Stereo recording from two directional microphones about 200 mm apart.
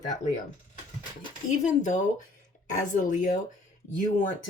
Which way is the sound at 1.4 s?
35° left (ahead or behind).